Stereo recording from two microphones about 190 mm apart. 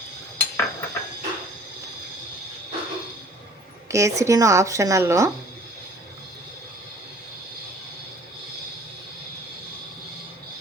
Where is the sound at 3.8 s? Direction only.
15° right (ahead or behind).